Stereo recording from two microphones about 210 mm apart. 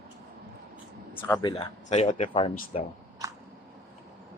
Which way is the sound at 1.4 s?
25° left (ahead or behind).